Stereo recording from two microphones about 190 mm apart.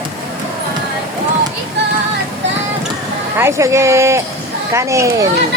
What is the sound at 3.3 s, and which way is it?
Speech, 15° right (ahead or behind).